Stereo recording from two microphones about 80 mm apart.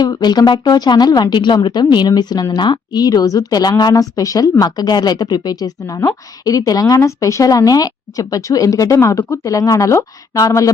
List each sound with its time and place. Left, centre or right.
0.0 s speech: left
5.8 s a woman's voice: left